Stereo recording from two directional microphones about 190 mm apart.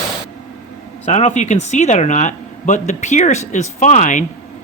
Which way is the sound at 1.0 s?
35° left (ahead or behind).